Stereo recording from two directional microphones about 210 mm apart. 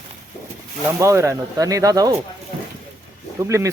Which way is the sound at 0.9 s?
15° right (ahead or behind).